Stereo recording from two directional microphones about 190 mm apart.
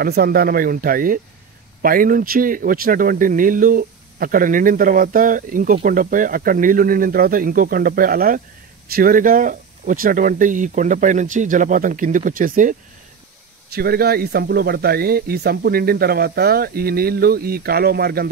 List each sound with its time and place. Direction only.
0.0 s speech: 55° right (ahead or behind)
13.7 s speech: 55° right (ahead or behind)